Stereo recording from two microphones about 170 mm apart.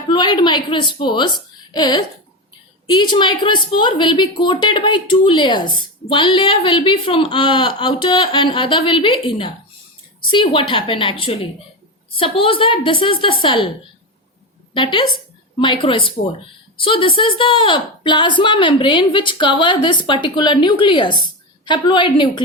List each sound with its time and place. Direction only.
0.1 s a woman's voice: 25° left (ahead or behind)
14.7 s a woman's voice: 30° left (ahead or behind)